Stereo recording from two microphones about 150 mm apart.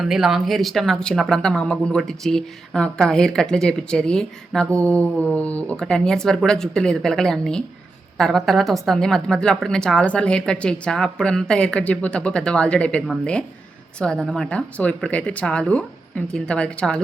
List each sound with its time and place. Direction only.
0.0 s speech: centre (ahead or behind)